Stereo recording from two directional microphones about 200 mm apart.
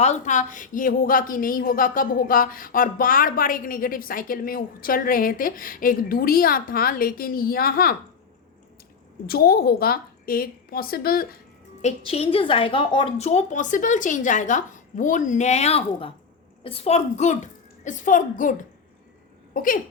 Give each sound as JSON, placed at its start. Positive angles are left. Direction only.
{"t": 0.0, "sound": "a woman's voice", "side_deg": 35}
{"t": 9.2, "sound": "a woman's voice", "side_deg": 50}
{"t": 11.8, "sound": "a woman's voice", "side_deg": 35}
{"t": 19.5, "sound": "a woman's voice", "side_deg": 45}